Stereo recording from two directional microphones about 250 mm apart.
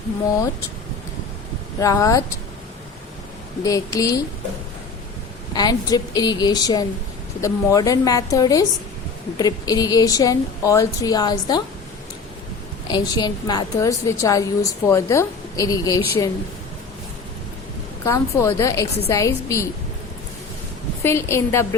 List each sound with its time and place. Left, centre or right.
1.8 s a woman's voice: centre
3.6 s a woman's voice: centre
5.5 s a woman's voice: centre
12.9 s a woman's voice: centre
18.0 s a woman's voice: centre
21.0 s a woman's voice: centre